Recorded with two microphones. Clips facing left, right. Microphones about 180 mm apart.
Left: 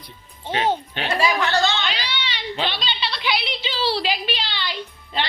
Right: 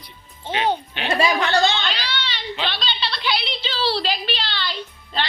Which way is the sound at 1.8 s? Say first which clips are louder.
Even; 15° left (ahead or behind).